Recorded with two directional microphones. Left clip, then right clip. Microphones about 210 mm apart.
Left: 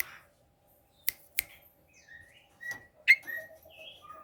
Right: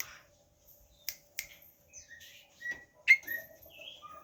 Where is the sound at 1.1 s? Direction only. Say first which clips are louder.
Left 5 dB; 50° left (ahead or behind).